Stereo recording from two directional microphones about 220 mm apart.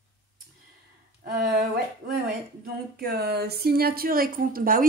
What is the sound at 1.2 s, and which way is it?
Speech, 40° right (ahead or behind).